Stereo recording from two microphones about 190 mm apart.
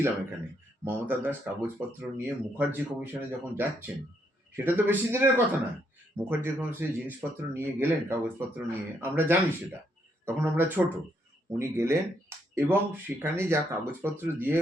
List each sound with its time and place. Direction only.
0.9 s speech: 10° right (ahead or behind)